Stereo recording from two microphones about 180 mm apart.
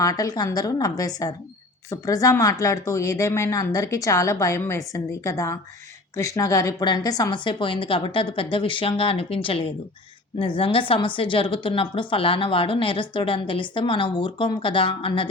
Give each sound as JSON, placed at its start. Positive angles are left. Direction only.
{"t": 0.0, "sound": "a woman's voice", "side_deg": 20}